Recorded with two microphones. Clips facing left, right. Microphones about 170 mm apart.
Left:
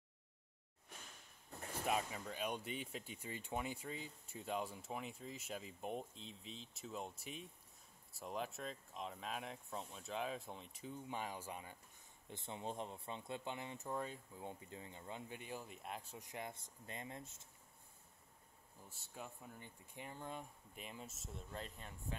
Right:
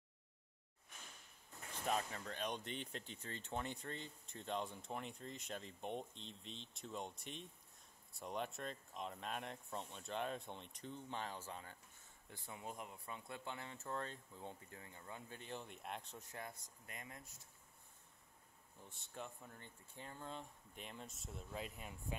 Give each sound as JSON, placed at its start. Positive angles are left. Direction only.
{"t": 1.7, "sound": "speech", "side_deg": 10}
{"t": 12.3, "sound": "speech", "side_deg": 25}
{"t": 18.9, "sound": "speech", "side_deg": 5}